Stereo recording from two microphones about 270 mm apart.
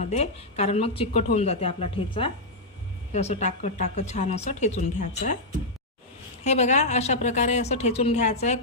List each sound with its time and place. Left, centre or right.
0.0 s a woman's voice: left
6.4 s a woman's voice: left